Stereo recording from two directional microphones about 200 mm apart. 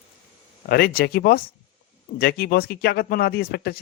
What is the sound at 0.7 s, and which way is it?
Speech, 50° left (ahead or behind).